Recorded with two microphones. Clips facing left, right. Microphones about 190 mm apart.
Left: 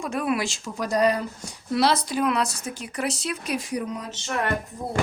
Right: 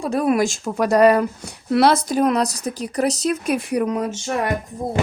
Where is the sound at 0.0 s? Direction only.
35° right (ahead or behind); by 4.1 s 65° right (ahead or behind).